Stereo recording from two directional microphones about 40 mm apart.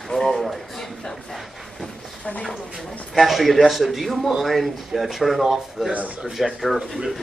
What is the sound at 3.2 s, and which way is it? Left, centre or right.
Speech, centre.